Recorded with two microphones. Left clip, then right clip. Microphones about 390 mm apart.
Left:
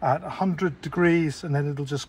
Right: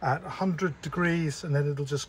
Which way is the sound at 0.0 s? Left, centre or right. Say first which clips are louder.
Left 5 dB; centre.